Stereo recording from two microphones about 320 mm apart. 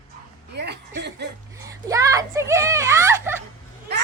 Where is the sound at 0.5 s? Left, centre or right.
Right.